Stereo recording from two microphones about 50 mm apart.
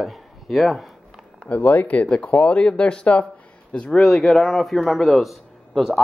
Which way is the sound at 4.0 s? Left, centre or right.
Centre.